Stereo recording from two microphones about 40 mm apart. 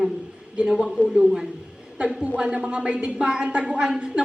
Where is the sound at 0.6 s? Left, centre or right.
Centre.